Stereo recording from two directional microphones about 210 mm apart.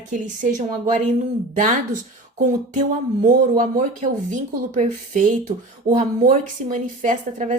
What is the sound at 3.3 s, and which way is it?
Speech, 40° right (ahead or behind).